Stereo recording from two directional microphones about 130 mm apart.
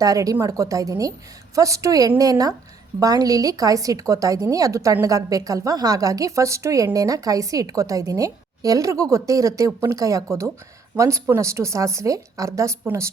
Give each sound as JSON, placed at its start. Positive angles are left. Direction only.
{"t": 0.0, "sound": "a woman's voice", "side_deg": -25}